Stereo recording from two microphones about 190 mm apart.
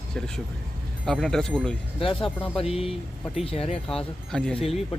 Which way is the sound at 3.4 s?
30° left (ahead or behind).